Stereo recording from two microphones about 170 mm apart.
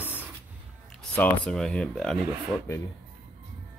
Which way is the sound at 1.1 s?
5° left (ahead or behind).